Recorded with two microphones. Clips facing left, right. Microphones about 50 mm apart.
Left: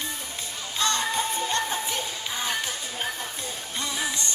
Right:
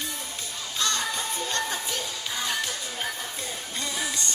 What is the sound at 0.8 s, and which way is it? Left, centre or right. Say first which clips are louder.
Music: left 3 dB; left.